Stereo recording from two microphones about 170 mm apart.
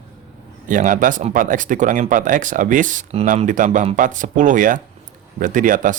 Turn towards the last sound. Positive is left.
turn(degrees=-50)  # may be behind; listen again after turning